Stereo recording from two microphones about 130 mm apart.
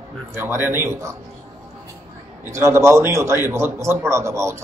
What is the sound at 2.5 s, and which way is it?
A man's voice, 20° right (ahead or behind).